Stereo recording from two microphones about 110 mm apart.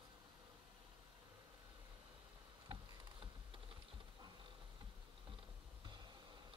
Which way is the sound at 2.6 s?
50° right (ahead or behind).